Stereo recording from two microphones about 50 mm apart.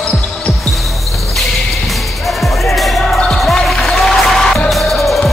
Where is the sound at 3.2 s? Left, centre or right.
Centre.